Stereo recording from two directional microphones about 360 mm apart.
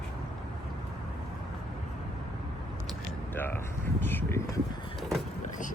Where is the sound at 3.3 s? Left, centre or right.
Centre.